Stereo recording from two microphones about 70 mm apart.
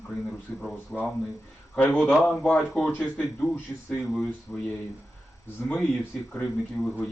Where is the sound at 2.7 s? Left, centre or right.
Centre.